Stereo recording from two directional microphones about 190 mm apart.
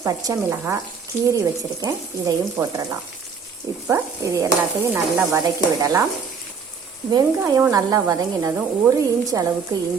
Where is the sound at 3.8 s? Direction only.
15° right (ahead or behind).